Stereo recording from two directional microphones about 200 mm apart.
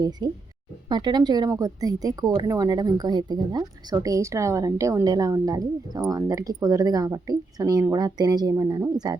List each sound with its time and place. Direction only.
0.2 s a woman's voice: 20° right (ahead or behind)